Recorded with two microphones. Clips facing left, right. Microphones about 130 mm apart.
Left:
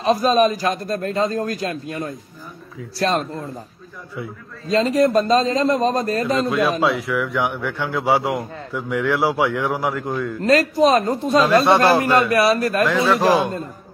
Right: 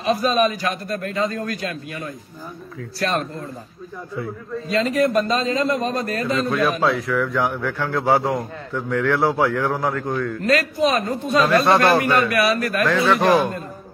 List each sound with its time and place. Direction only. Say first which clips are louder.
0.0 s a man's voice: left 3 dB; 35° left (ahead or behind)
4.6 s a man's voice: left 3 dB; 35° left (ahead or behind)
6.8 s a man's voice: even; centre (ahead or behind)
10.4 s a man's voice: left 5 dB; 35° left (ahead or behind)
11.6 s a man's voice: left 1 dB; centre (ahead or behind)
12.1 s a man's voice: left 2 dB; 30° left (ahead or behind)
13.1 s a man's voice: right 1 dB; centre (ahead or behind)